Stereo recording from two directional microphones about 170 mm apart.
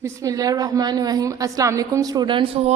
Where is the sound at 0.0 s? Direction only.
20° right (ahead or behind).